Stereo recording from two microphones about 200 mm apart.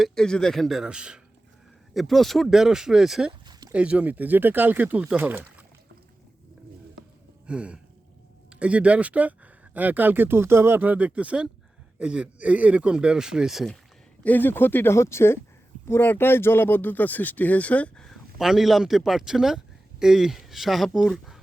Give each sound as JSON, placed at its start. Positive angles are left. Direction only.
{"t": 0.0, "sound": "speech", "side_deg": 5}
{"t": 3.4, "sound": "a sound", "side_deg": -20}
{"t": 3.7, "sound": "speech", "side_deg": -5}
{"t": 7.4, "sound": "a sound", "side_deg": -5}
{"t": 8.4, "sound": "speech", "side_deg": -5}
{"t": 14.3, "sound": "speech", "side_deg": 10}